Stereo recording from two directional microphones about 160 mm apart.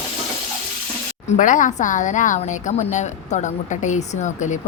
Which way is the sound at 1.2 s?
50° left (ahead or behind).